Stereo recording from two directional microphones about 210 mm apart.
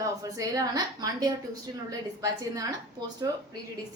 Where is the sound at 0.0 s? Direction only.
15° right (ahead or behind).